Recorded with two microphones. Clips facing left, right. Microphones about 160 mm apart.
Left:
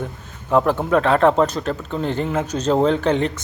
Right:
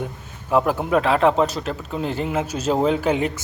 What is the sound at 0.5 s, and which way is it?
Speech, 10° right (ahead or behind).